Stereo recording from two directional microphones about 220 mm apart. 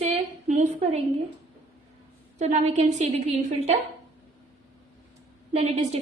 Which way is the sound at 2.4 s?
30° right (ahead or behind).